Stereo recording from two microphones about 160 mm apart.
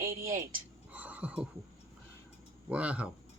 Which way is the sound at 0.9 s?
10° right (ahead or behind).